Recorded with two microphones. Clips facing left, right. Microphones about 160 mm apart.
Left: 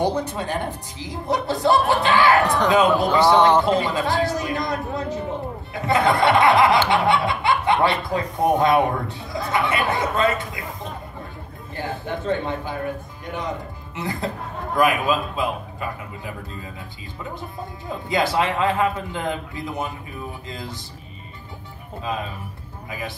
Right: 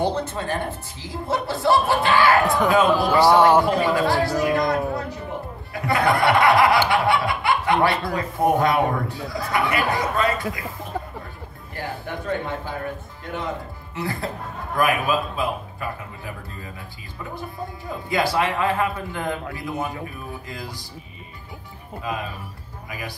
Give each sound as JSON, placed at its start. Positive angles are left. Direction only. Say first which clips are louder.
{"t": 0.0, "sound": "speech", "louder": "left 1 dB", "side_deg": 15}
{"t": 2.4, "sound": "speech", "louder": "even", "side_deg": 0}
{"t": 2.7, "sound": "speech", "louder": "left 1 dB", "side_deg": 20}
{"t": 3.3, "sound": "a man's voice", "louder": "right 1 dB", "side_deg": -10}
{"t": 3.6, "sound": "speech", "louder": "right 1 dB", "side_deg": 20}
{"t": 17.4, "sound": "speech", "louder": "right 1 dB", "side_deg": 20}
{"t": 20.4, "sound": "speech", "louder": "left 1 dB", "side_deg": 20}
{"t": 22.8, "sound": "speech", "louder": "left 2 dB", "side_deg": 25}